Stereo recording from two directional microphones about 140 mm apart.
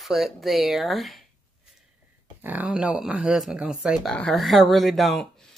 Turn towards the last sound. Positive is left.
turn(degrees=0)  # may be behind; listen again after turning